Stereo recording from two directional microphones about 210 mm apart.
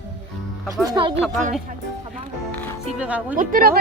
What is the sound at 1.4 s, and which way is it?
Speech, 35° right (ahead or behind).